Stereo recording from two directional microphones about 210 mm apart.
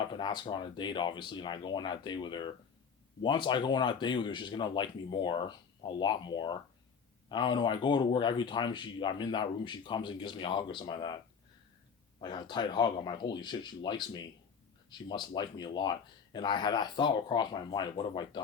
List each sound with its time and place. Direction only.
0.1 s speech: 20° left (ahead or behind)
12.2 s speech: 20° left (ahead or behind)